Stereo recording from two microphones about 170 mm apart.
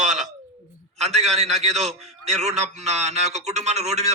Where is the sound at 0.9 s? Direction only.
40° right (ahead or behind).